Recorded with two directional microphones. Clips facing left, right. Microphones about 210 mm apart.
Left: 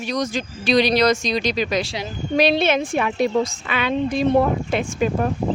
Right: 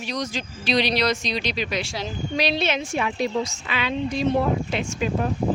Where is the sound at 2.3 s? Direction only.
55° left (ahead or behind).